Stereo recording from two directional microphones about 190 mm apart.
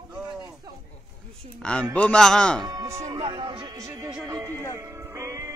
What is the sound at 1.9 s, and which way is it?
Speech, 5° left (ahead or behind).